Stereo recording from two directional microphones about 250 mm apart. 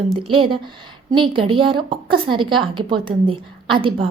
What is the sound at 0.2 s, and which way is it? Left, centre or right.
A woman's voice, centre.